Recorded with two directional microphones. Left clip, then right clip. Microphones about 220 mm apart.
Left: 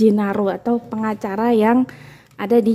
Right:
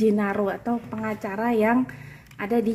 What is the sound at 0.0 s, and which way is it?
A woman's voice, 55° left (ahead or behind).